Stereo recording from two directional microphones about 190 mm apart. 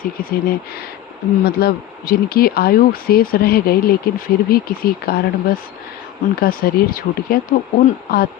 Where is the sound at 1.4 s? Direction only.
55° left (ahead or behind).